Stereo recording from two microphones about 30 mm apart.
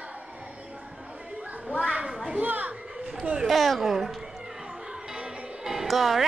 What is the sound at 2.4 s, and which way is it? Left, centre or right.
Speech, right.